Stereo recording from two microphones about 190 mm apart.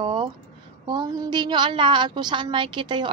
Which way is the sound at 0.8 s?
20° right (ahead or behind).